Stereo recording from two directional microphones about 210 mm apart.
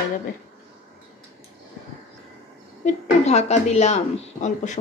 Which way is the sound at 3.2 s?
30° left (ahead or behind).